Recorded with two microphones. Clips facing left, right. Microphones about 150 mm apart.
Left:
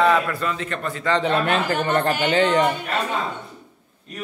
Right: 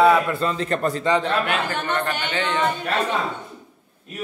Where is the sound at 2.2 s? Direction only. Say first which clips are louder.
Left 7 dB; 35° left (ahead or behind).